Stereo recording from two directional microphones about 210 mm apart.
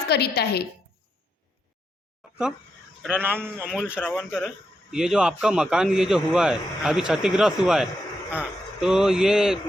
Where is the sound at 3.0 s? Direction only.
10° right (ahead or behind).